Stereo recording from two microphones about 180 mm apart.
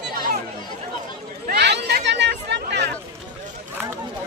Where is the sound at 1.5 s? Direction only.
70° right (ahead or behind).